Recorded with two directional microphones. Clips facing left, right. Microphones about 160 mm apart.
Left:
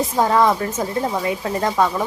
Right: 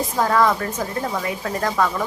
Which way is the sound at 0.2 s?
20° left (ahead or behind).